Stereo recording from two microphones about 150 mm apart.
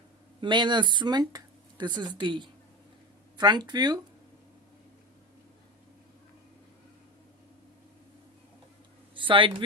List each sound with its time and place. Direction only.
0.4 s speech: 30° right (ahead or behind)
9.1 s speech: 35° right (ahead or behind)